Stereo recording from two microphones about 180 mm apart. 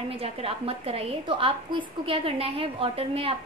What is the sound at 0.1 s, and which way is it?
A woman's voice, 30° right (ahead or behind).